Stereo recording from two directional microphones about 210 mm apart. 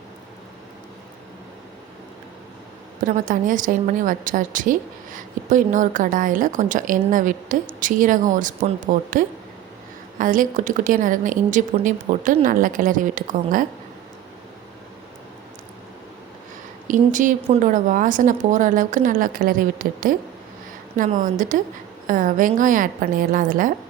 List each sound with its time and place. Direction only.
3.0 s a woman's voice: 40° right (ahead or behind)
16.9 s a woman's voice: 40° right (ahead or behind)